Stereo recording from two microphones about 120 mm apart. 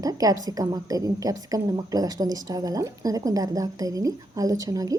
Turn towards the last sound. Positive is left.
turn(degrees=-30)  # may be behind; listen again after turning